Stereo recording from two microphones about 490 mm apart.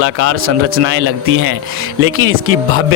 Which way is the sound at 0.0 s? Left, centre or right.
Right.